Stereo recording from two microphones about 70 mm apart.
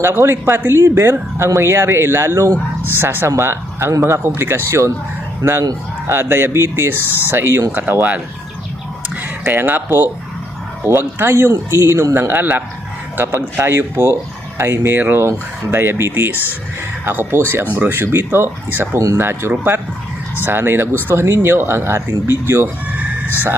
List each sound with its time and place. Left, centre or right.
0.0 s speech: right
6.1 s speech: right
9.0 s a sound: right
10.8 s speech: right
12.3 s speech: right